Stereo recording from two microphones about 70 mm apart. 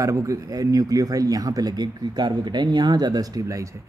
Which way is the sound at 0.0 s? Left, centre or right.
Right.